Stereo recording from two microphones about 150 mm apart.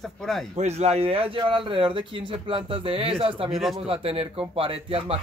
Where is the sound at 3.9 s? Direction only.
40° right (ahead or behind).